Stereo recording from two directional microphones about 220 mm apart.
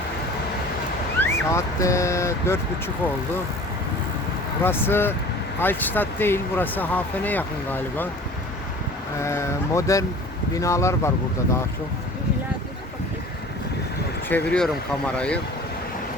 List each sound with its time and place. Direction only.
1.2 s speech: 15° left (ahead or behind)
4.6 s speech: 10° left (ahead or behind)
9.2 s speech: 10° left (ahead or behind)
14.3 s speech: 5° left (ahead or behind)